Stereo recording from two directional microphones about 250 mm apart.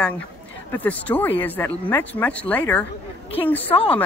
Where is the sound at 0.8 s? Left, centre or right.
Centre.